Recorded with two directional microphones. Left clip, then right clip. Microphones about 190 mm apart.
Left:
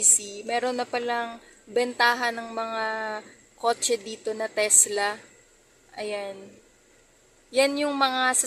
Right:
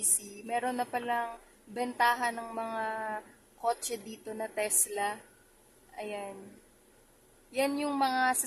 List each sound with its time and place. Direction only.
0.4 s a woman's voice: 5° left (ahead or behind)
7.5 s a woman's voice: 5° left (ahead or behind)